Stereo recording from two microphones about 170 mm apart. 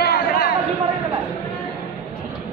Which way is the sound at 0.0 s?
65° left (ahead or behind).